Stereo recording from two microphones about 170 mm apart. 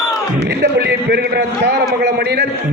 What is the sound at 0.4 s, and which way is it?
A man's voice, 80° right.